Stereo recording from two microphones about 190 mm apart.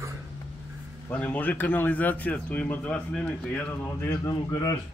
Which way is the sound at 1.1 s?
10° left (ahead or behind).